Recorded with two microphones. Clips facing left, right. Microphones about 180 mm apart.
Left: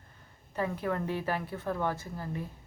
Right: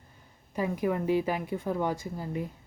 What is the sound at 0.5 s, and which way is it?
Speech, 15° right (ahead or behind).